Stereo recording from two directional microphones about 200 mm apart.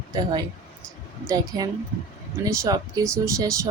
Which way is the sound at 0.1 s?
20° right (ahead or behind).